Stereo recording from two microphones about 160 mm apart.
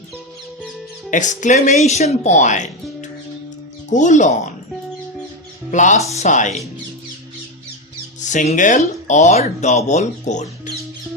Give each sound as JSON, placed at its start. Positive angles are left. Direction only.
{"t": 1.1, "sound": "speech", "side_deg": 50}
{"t": 3.9, "sound": "speech", "side_deg": 50}
{"t": 5.7, "sound": "speech", "side_deg": 50}
{"t": 8.2, "sound": "speech", "side_deg": 50}